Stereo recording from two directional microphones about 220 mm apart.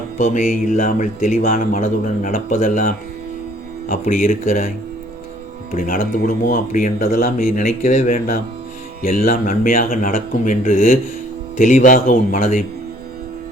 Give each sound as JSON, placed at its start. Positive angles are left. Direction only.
{"t": 0.2, "sound": "speech", "side_deg": 35}
{"t": 5.7, "sound": "speech", "side_deg": 40}